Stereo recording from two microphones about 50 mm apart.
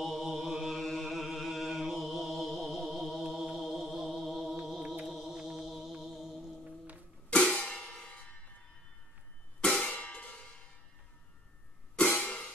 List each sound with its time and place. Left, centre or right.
0.0 s mantra: centre
7.2 s music: left
9.6 s cymbal: centre
12.0 s music: left